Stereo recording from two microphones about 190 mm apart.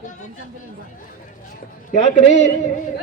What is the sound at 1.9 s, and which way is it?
Speech, 40° left (ahead or behind).